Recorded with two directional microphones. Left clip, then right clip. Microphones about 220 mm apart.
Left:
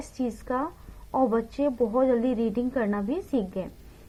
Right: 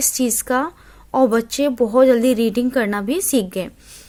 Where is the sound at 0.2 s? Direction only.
40° right (ahead or behind).